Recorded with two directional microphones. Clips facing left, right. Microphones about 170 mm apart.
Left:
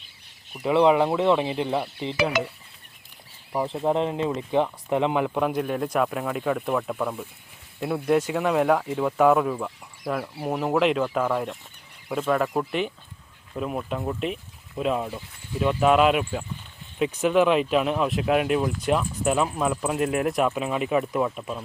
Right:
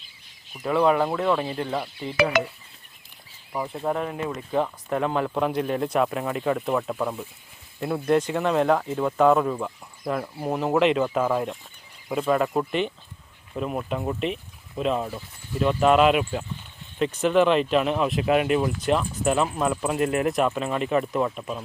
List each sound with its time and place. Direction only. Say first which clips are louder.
0.6 s speech: left 2 dB; 20° left (ahead or behind)
2.0 s stir: left 2 dB; 20° left (ahead or behind)
3.7 s speech: left 3 dB; 25° left (ahead or behind); by 21.6 s centre (ahead or behind)